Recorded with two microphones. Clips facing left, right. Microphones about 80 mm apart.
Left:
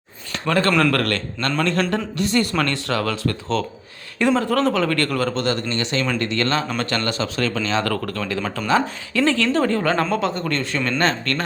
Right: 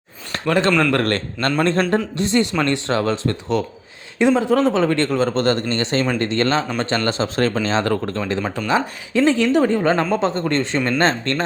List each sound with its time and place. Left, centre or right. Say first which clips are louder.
1.0 s speech: right 3 dB; right
5.3 s speech: right 4 dB; right